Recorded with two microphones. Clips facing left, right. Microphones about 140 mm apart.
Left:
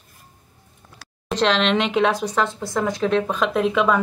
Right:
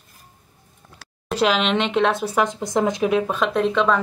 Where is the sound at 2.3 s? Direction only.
15° right (ahead or behind).